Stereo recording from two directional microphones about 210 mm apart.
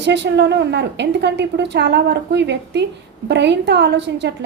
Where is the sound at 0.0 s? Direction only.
55° right (ahead or behind).